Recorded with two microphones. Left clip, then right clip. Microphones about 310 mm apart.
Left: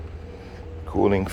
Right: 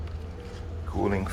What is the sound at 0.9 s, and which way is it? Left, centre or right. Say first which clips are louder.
Speech: left 7 dB; left.